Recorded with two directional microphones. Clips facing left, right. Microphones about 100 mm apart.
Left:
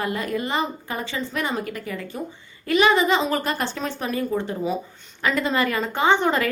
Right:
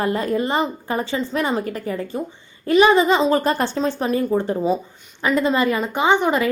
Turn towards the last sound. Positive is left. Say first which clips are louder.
# right 2 dB
turn(degrees=-15)  # may be behind; listen again after turning